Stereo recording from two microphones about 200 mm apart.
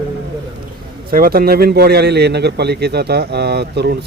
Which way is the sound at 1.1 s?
50° right (ahead or behind).